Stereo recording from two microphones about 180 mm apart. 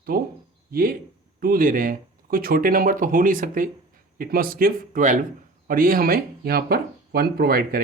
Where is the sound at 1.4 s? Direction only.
50° right (ahead or behind).